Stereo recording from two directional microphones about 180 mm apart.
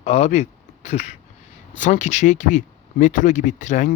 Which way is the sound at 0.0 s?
35° left (ahead or behind).